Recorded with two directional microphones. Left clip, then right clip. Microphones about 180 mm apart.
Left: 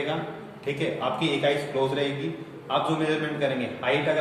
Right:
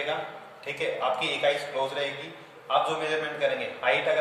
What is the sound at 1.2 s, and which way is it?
A man's voice, 25° right (ahead or behind).